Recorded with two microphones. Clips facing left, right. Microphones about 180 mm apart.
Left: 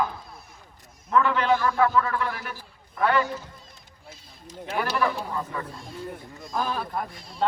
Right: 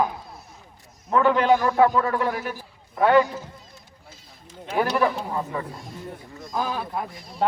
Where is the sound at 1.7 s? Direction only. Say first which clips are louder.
Right 3 dB; 20° right (ahead or behind).